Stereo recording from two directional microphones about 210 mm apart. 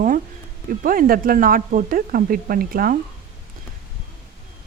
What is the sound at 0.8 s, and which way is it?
Speech, 40° right (ahead or behind).